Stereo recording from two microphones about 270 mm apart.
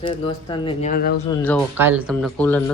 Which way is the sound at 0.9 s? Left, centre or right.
Left.